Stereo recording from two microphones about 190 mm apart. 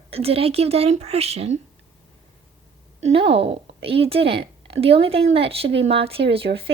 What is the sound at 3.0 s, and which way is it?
A woman's voice, 30° right (ahead or behind).